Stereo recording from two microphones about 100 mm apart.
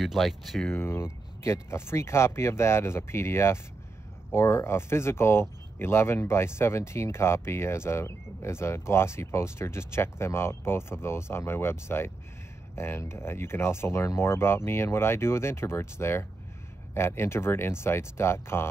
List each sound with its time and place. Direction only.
0.0 s speech: centre (ahead or behind)
0.7 s speech: 25° left (ahead or behind)